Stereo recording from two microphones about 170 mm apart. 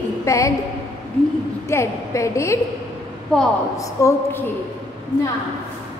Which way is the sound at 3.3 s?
5° left (ahead or behind).